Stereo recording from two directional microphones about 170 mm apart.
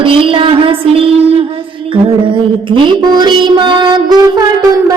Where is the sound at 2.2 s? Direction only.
30° right (ahead or behind).